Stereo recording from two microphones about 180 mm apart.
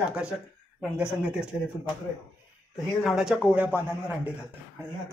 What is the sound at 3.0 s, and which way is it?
Speech, centre (ahead or behind).